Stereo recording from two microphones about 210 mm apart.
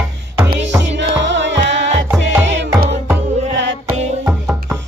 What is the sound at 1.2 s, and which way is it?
Music, 60° right (ahead or behind).